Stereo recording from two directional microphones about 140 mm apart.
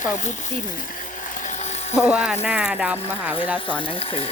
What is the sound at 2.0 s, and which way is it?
Speech, 5° right (ahead or behind).